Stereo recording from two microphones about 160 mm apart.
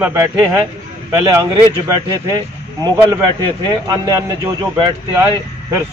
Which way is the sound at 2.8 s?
20° right (ahead or behind).